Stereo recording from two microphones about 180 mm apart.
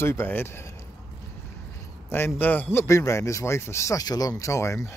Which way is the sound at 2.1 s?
10° left (ahead or behind).